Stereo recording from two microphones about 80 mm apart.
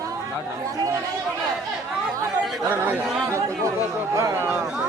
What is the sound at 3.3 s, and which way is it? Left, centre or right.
Speech, right.